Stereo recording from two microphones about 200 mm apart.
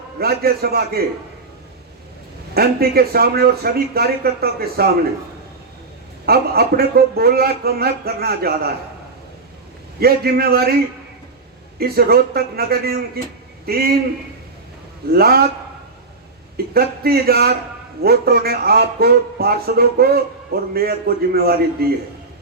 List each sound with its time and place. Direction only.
0.2 s a man's voice: 50° right (ahead or behind)
2.6 s a man's voice: 50° right (ahead or behind)
6.2 s a man's voice: 50° right (ahead or behind)
10.0 s a man's voice: 50° right (ahead or behind)
11.8 s a man's voice: 50° right (ahead or behind)
15.1 s a man's voice: 50° right (ahead or behind)
16.7 s a man's voice: 50° right (ahead or behind)